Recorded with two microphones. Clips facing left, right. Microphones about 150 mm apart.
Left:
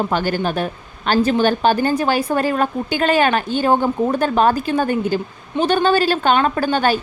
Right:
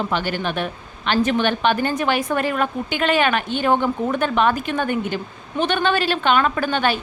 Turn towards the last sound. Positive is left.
turn(degrees=40)  # may be behind; listen again after turning